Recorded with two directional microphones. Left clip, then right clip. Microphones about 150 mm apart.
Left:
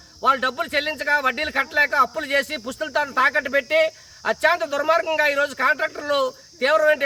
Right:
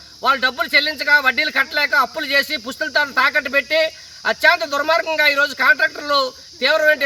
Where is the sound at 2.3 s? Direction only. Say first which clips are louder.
Right 4 dB; 45° left (ahead or behind).